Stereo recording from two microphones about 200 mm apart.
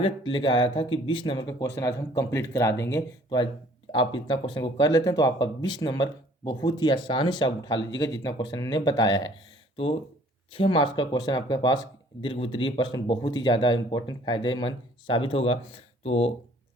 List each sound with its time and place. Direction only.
0.0 s speech: 25° left (ahead or behind)